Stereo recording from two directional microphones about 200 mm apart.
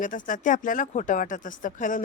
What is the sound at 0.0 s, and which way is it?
A woman's voice, 40° left (ahead or behind).